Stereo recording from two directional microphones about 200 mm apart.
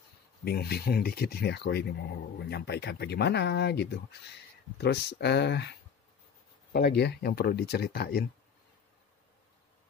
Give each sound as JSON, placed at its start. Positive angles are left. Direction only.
{"t": 0.5, "sound": "speech", "side_deg": 50}